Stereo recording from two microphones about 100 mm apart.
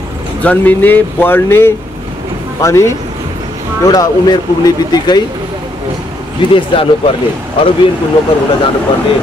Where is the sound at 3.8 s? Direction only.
40° left (ahead or behind).